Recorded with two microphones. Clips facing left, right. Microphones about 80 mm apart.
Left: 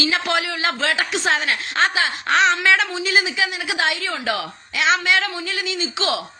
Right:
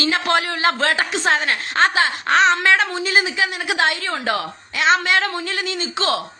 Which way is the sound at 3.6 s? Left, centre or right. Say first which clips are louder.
Right 2 dB; right.